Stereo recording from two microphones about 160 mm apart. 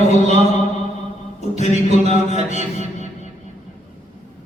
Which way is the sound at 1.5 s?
45° left (ahead or behind).